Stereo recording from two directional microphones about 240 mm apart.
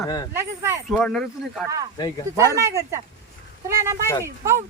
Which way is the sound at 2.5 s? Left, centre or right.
Centre.